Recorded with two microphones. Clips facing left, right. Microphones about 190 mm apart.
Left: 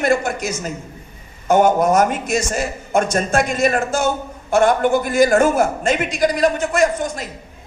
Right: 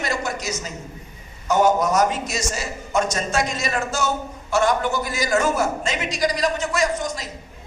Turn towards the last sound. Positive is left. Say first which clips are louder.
# left 5 dB
turn(degrees=55)  # may be behind; listen again after turning